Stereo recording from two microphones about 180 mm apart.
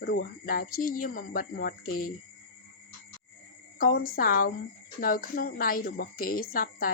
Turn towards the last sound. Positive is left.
turn(degrees=55)  # may be behind; listen again after turning